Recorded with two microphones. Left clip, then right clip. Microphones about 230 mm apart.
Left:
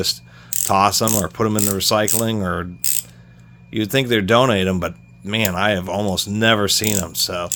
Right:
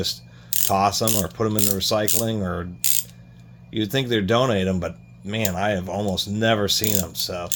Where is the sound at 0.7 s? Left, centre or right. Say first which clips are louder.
Left 4 dB; left.